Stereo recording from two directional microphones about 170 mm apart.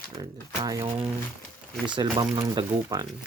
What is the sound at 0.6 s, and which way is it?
Speech, 20° right (ahead or behind).